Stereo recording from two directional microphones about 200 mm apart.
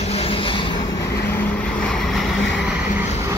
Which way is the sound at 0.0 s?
30° left (ahead or behind).